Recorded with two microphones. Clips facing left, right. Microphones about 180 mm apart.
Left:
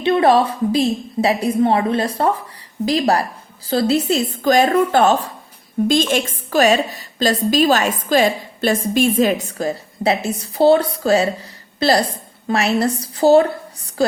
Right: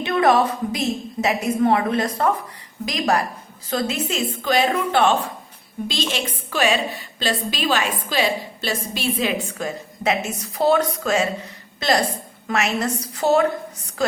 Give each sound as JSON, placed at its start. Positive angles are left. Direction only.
{"t": 0.0, "sound": "a woman's voice", "side_deg": 30}